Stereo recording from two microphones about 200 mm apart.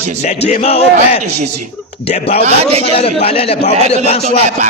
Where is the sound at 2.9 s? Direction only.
30° left (ahead or behind).